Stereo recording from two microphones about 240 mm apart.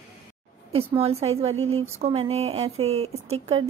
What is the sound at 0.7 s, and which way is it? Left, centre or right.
Speech, right.